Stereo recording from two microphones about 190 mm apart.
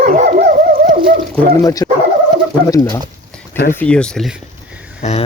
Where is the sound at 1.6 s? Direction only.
15° left (ahead or behind).